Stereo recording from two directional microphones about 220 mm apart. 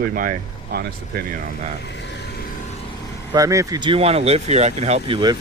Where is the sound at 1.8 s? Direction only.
50° left (ahead or behind).